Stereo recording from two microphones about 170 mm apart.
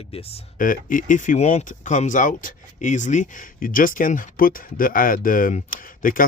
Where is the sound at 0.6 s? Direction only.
55° left (ahead or behind).